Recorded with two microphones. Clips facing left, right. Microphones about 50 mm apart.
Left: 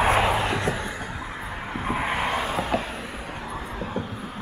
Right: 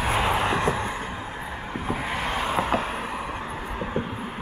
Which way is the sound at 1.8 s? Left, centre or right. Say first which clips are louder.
Left 3 dB; centre.